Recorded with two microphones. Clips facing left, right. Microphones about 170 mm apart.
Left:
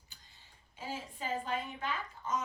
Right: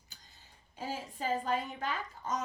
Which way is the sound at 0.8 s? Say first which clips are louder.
Right 3 dB; 40° right (ahead or behind).